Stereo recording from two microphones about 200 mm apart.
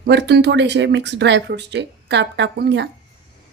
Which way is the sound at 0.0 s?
60° right (ahead or behind).